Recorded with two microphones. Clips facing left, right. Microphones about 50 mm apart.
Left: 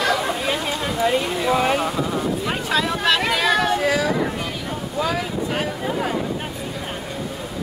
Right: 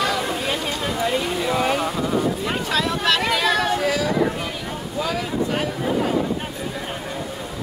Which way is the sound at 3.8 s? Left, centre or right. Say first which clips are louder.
Even; centre.